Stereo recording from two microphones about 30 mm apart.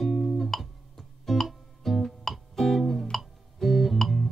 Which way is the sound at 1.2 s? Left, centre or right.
Centre.